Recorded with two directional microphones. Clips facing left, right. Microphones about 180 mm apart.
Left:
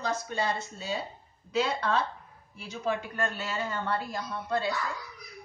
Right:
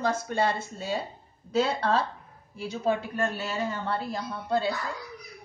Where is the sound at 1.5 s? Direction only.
35° right (ahead or behind).